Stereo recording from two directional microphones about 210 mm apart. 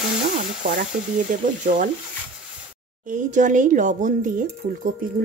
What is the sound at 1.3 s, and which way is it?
Speech, 40° right (ahead or behind).